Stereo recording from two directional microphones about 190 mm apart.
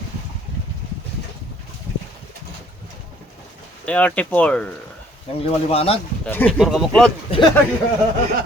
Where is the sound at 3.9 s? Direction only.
5° left (ahead or behind).